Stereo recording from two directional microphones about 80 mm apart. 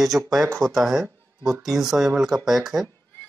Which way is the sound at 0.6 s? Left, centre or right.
Centre.